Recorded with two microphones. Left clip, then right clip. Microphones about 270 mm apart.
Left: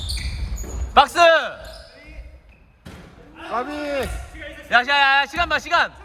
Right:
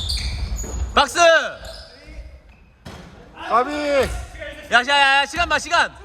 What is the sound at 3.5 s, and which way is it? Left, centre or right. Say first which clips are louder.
Speech: right 7 dB; right.